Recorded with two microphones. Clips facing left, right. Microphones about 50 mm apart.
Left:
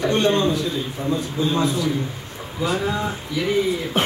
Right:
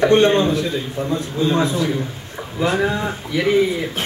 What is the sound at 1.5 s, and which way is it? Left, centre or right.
Speech, right.